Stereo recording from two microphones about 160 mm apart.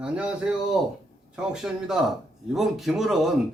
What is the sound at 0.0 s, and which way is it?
A man's voice, 5° right (ahead or behind).